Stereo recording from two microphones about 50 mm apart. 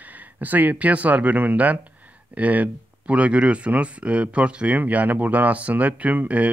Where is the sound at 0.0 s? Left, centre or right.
Right.